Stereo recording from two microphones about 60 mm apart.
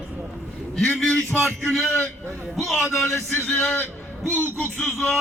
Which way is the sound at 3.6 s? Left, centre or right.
Left.